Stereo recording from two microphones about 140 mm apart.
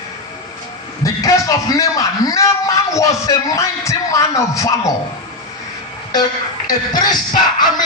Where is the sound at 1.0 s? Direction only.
25° left (ahead or behind).